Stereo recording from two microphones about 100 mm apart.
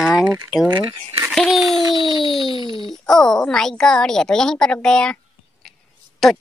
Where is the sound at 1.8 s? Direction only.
45° right (ahead or behind).